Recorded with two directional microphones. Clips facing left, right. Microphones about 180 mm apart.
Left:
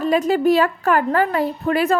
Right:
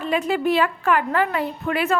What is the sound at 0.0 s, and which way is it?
A woman's voice, 40° left (ahead or behind).